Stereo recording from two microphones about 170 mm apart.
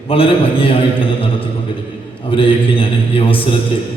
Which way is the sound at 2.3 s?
30° left (ahead or behind).